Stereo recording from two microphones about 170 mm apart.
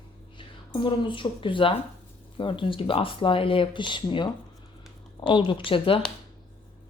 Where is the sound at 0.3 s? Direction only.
30° left (ahead or behind).